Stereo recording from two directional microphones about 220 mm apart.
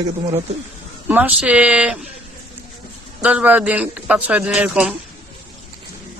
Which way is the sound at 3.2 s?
5° right (ahead or behind).